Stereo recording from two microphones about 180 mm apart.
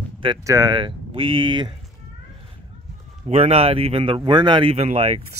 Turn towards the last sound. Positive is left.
turn(degrees=-35)  # may be behind; listen again after turning